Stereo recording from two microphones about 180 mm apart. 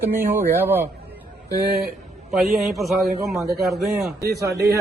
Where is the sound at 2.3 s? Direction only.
Centre (ahead or behind).